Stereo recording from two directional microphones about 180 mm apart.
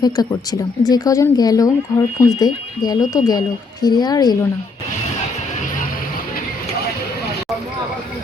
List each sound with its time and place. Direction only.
0.0 s speech: 20° left (ahead or behind)